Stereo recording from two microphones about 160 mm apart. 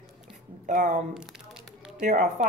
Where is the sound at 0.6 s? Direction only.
50° right (ahead or behind).